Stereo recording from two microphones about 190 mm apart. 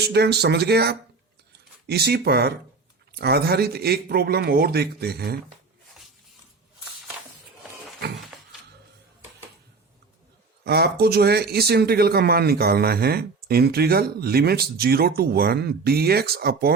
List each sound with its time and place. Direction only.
0.0 s speech: 60° right (ahead or behind)
10.6 s speech: 60° right (ahead or behind)